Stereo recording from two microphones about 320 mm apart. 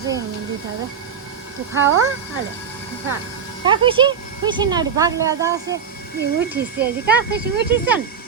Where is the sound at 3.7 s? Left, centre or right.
Centre.